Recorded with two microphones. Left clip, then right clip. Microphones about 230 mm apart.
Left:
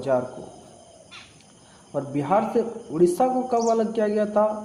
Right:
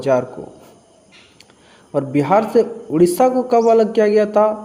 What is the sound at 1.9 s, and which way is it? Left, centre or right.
A man's voice, right.